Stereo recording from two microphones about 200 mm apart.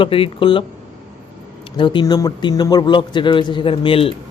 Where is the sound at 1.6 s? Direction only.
25° left (ahead or behind).